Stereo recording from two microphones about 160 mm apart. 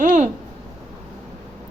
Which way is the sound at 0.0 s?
50° right (ahead or behind).